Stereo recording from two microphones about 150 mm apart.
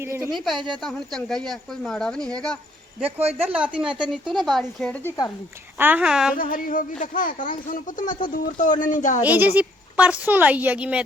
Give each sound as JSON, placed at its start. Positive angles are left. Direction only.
{"t": 0.0, "sound": "a woman's voice", "side_deg": -15}
{"t": 0.3, "sound": "speech", "side_deg": 0}
{"t": 3.0, "sound": "speech", "side_deg": -40}
{"t": 3.4, "sound": "a woman's voice", "side_deg": -10}
{"t": 5.7, "sound": "a woman's voice", "side_deg": -10}
{"t": 6.3, "sound": "speech", "side_deg": 65}
{"t": 9.2, "sound": "a woman's voice", "side_deg": -10}